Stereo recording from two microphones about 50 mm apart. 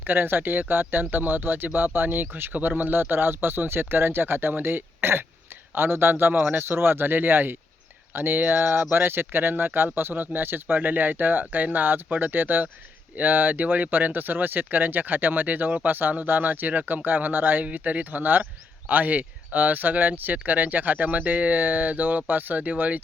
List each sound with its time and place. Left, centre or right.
0.0 s speech: right